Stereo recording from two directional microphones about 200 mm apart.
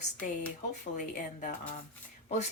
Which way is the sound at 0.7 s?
40° left (ahead or behind).